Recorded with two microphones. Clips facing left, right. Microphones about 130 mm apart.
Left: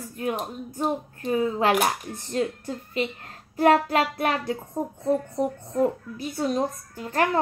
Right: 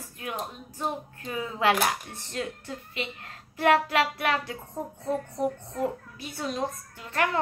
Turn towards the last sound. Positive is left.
turn(degrees=40)  # may be behind; listen again after turning